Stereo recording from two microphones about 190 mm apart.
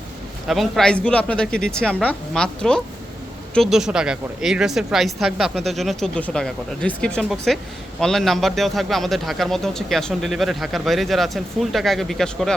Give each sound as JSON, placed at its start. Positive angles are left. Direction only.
{"t": 0.4, "sound": "a man's voice", "side_deg": 0}